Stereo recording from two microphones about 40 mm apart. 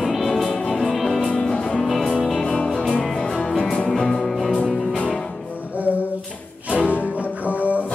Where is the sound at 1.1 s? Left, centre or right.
Centre.